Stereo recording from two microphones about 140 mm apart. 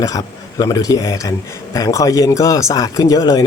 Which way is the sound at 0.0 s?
25° left (ahead or behind).